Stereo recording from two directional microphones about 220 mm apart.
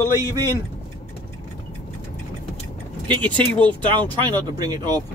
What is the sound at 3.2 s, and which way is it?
Speech, 5° left (ahead or behind).